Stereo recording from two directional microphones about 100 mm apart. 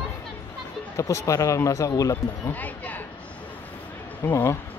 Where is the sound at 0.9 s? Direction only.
30° left (ahead or behind).